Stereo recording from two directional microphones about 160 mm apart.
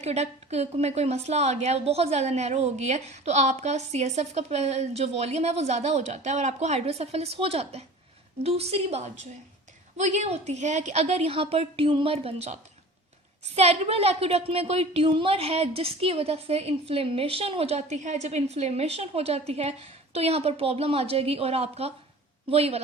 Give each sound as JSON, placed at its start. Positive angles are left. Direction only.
{"t": 0.0, "sound": "a woman's voice", "side_deg": -40}
{"t": 13.6, "sound": "a woman's voice", "side_deg": -40}